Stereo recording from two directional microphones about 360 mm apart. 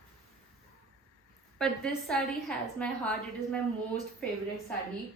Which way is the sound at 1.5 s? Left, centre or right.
Centre.